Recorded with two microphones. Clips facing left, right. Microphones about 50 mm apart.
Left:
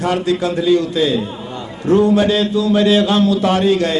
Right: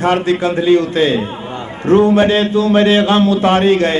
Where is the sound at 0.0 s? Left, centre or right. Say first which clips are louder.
Right 3 dB; right.